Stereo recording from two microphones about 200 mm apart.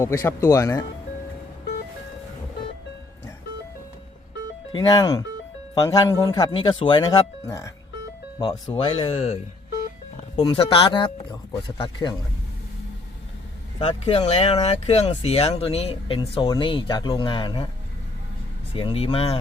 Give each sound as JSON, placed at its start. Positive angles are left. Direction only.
{"t": 0.0, "sound": "speech", "side_deg": 15}
{"t": 4.7, "sound": "speech", "side_deg": 20}
{"t": 13.8, "sound": "speech", "side_deg": 30}
{"t": 18.7, "sound": "speech", "side_deg": 25}